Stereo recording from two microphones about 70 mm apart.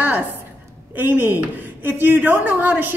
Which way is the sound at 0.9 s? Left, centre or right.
Right.